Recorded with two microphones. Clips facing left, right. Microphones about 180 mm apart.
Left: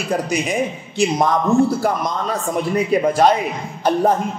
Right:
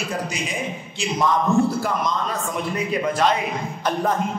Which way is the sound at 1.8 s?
45° left (ahead or behind).